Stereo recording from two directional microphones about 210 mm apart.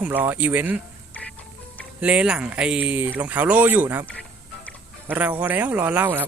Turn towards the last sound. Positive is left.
turn(degrees=-10)  # may be behind; listen again after turning